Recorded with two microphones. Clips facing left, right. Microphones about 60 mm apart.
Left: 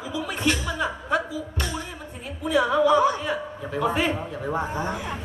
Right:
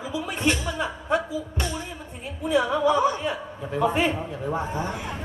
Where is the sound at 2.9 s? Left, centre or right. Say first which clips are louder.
Left 2 dB; left.